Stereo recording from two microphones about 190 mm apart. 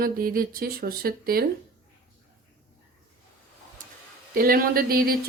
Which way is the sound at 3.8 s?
45° right (ahead or behind).